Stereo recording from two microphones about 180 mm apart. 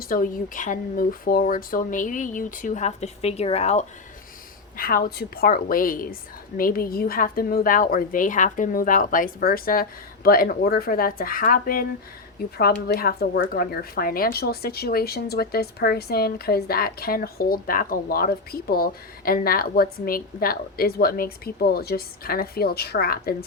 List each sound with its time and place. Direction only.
0.0 s speech: 50° left (ahead or behind); by 3.8 s 35° left (ahead or behind)
4.8 s speech: 55° left (ahead or behind)